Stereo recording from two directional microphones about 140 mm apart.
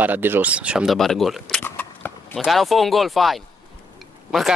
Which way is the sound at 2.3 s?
Centre (ahead or behind).